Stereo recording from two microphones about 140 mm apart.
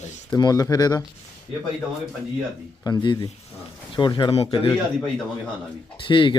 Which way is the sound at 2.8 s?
30° left (ahead or behind).